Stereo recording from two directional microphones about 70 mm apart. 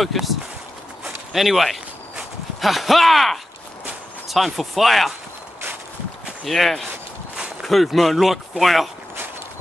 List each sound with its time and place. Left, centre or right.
0.0 s speech: centre
1.3 s speech: centre
6.4 s speech: centre